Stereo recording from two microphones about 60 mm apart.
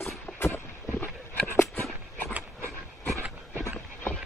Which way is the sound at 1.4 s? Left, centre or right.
Left.